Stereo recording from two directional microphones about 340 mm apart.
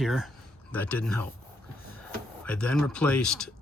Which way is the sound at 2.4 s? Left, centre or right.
Centre.